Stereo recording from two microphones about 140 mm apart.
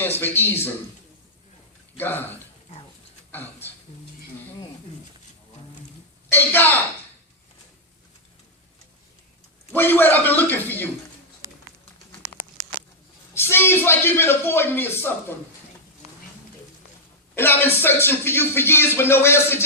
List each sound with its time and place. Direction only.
0.0 s speech: 15° left (ahead or behind)
2.0 s speech: 15° left (ahead or behind)
3.3 s speech: 15° left (ahead or behind)
6.3 s speech: 15° left (ahead or behind)
9.7 s speech: 15° left (ahead or behind)
13.3 s speech: 15° left (ahead or behind)
17.3 s speech: 15° left (ahead or behind)